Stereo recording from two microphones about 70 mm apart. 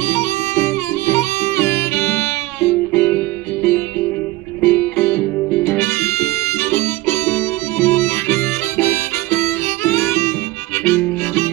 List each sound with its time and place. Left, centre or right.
0.1 s music: left
10.9 s harmonica: left